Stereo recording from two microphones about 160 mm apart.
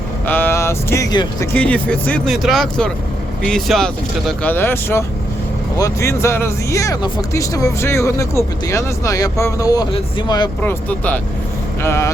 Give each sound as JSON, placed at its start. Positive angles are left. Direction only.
{"t": 0.3, "sound": "speech", "side_deg": 10}
{"t": 10.6, "sound": "speech", "side_deg": 10}